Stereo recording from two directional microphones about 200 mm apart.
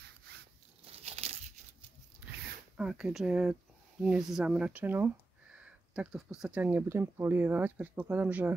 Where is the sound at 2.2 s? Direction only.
5° right (ahead or behind).